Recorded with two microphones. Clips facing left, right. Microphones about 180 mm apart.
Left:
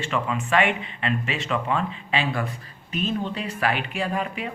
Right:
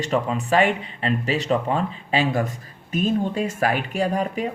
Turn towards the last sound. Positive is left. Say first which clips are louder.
# right 5 dB
turn(degrees=-40)  # may be behind; listen again after turning